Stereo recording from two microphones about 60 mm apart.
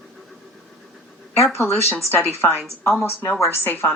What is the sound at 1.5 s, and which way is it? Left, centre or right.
A woman's voice, left.